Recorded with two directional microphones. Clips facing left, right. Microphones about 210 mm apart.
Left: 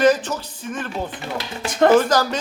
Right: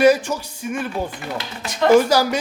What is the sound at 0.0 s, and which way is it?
Speech, 10° right (ahead or behind).